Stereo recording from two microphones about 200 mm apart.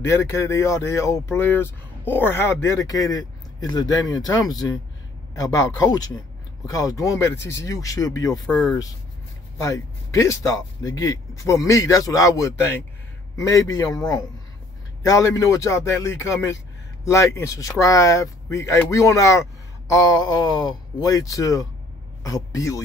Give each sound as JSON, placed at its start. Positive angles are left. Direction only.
{"t": 0.0, "sound": "speech", "side_deg": 15}
{"t": 8.5, "sound": "speech", "side_deg": 0}
{"t": 9.6, "sound": "speech", "side_deg": 15}
{"t": 15.0, "sound": "speech", "side_deg": 15}